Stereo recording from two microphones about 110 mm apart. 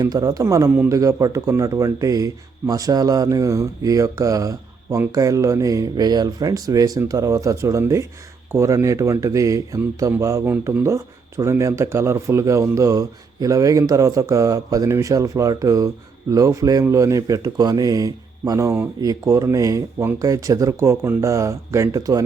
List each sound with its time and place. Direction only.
0.0 s speech: 35° right (ahead or behind)
0.7 s speech: 20° right (ahead or behind)
0.9 s speech: 30° right (ahead or behind)